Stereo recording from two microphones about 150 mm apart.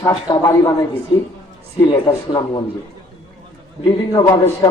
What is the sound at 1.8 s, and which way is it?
Speech, 25° left (ahead or behind).